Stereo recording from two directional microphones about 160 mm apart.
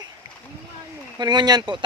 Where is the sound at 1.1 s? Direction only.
25° right (ahead or behind).